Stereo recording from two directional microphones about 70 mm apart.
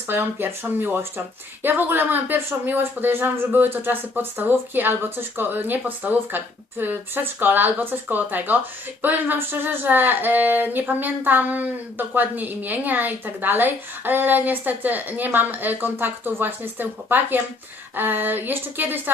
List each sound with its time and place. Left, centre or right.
0.1 s speech: right